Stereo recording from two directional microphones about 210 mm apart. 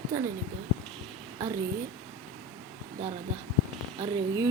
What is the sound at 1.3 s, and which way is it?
Speech, 15° right (ahead or behind).